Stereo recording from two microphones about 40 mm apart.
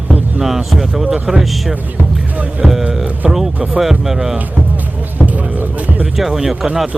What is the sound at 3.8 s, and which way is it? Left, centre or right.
Speech, centre.